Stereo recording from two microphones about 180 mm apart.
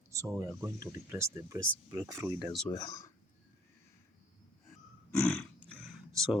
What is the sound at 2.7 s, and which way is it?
Speech, 20° left (ahead or behind).